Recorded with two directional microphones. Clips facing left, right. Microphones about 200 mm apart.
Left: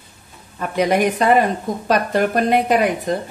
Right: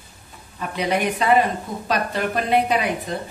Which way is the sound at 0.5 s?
45° left (ahead or behind).